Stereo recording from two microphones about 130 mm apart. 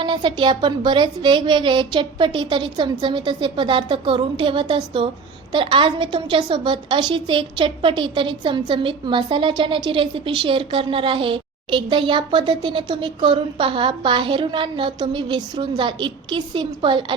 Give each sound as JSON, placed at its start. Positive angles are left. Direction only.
{"t": 0.0, "sound": "a woman's voice", "side_deg": -35}